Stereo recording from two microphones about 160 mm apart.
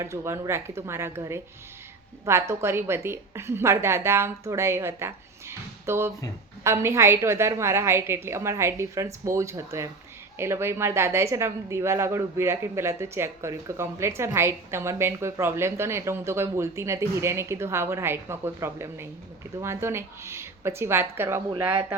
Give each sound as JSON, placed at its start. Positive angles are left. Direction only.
{"t": 0.0, "sound": "a woman's voice", "side_deg": -15}